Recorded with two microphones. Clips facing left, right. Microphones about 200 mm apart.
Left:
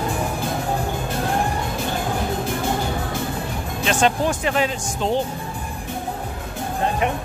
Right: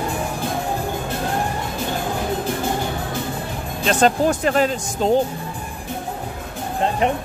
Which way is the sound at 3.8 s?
40° right (ahead or behind).